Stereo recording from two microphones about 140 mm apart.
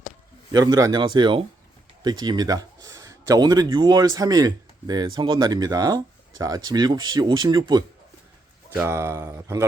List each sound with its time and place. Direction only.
0.5 s a man's voice: 25° right (ahead or behind)
8.7 s a man's voice: 20° right (ahead or behind)